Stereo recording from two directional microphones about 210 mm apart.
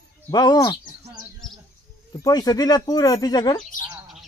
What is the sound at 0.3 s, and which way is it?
Speech, 20° left (ahead or behind).